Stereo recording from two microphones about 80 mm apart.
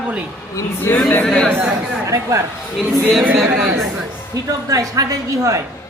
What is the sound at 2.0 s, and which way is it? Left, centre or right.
Speech, right.